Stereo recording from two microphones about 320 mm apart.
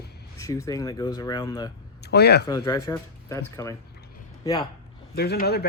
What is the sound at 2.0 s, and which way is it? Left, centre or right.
Speech, left.